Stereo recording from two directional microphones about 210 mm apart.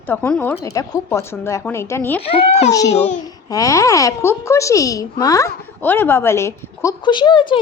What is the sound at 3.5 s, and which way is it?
A woman's voice, 15° left (ahead or behind).